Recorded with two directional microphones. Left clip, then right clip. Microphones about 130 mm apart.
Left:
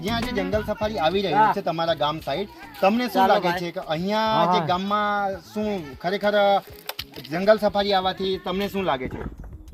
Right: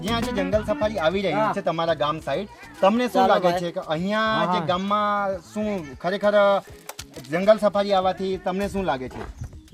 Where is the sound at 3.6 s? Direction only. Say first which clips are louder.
Right 1 dB; 30° right (ahead or behind).